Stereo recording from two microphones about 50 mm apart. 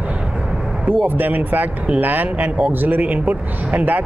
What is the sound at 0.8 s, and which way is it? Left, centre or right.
Speech, right.